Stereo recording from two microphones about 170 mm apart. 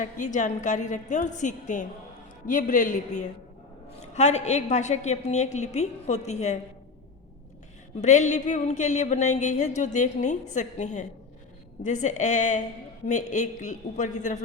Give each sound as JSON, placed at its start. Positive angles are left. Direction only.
{"t": 0.0, "sound": "a woman's voice", "side_deg": 45}
{"t": 8.0, "sound": "a woman's voice", "side_deg": 45}